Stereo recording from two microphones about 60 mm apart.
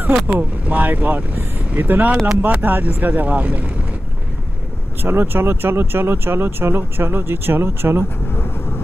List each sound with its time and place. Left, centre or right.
0.1 s speech: right
5.0 s speech: right